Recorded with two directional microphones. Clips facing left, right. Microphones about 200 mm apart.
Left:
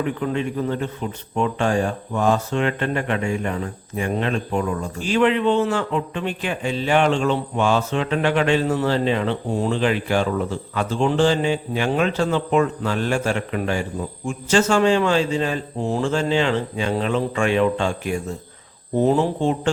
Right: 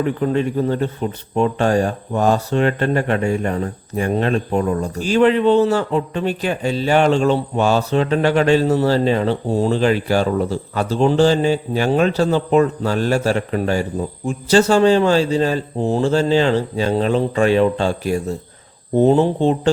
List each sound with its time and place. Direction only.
0.2 s speech: 40° right (ahead or behind)